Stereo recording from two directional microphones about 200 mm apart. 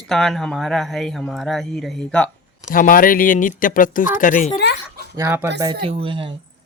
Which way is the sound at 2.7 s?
45° left (ahead or behind).